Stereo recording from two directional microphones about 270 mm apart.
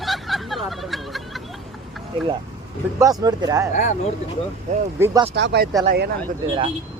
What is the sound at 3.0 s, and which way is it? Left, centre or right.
Speech, centre.